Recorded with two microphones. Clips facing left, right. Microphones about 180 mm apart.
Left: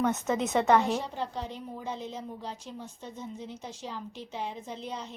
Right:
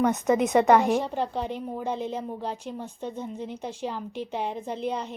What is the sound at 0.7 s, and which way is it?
Speech, 55° right (ahead or behind).